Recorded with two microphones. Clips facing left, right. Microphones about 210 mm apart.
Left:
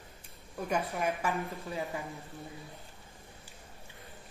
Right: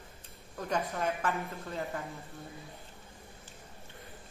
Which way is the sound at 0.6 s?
10° left (ahead or behind).